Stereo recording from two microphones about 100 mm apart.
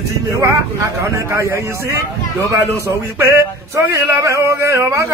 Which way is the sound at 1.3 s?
25° right (ahead or behind).